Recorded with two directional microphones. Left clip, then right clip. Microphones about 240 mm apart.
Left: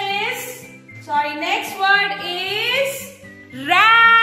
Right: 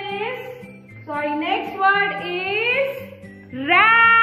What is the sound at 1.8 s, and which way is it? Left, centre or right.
Female singing, centre.